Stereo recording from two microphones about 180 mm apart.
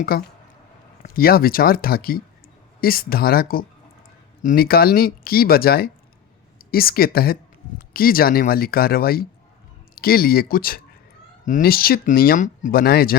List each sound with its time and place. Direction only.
0.1 s speech: 55° left (ahead or behind)